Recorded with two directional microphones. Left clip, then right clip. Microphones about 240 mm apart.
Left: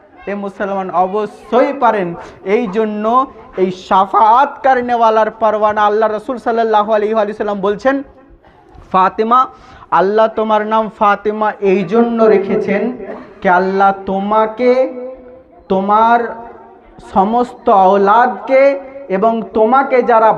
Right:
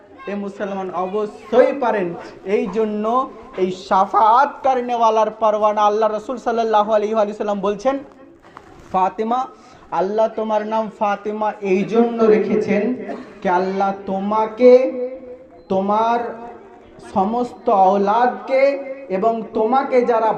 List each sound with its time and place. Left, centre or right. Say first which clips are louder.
0.3 s a woman's voice: left 6 dB; left
8.9 s a woman's voice: left 7 dB; left